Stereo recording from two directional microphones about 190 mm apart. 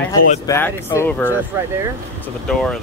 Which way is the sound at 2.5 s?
5° left (ahead or behind).